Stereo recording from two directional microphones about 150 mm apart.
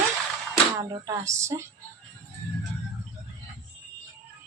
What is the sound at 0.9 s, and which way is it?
Speech, 20° right (ahead or behind).